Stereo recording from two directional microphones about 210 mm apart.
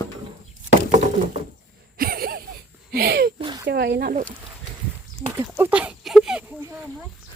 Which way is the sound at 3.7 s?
50° right (ahead or behind).